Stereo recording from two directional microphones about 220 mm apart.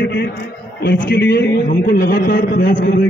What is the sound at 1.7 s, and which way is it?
A man's voice, 40° left (ahead or behind).